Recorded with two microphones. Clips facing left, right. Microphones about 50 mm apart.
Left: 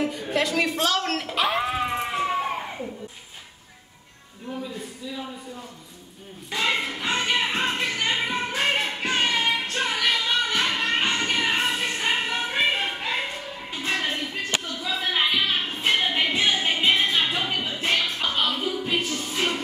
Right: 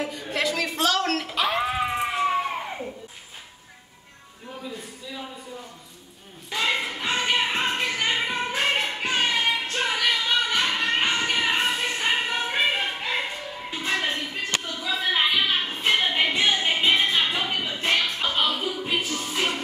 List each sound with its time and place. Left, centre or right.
0.0 s music: centre
6.5 s music: centre
8.4 s a sound: centre
13.8 s music: centre
14.1 s a sound: centre
16.1 s music: centre